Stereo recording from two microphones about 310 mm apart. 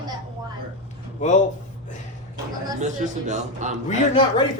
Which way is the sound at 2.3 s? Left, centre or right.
Centre.